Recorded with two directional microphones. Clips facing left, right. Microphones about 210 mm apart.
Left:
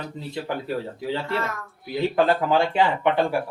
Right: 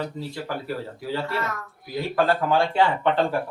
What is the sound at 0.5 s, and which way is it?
Speech, 20° left (ahead or behind).